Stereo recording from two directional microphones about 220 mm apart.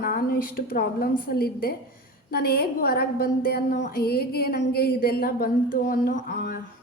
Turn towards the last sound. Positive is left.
turn(degrees=40)  # may be behind; listen again after turning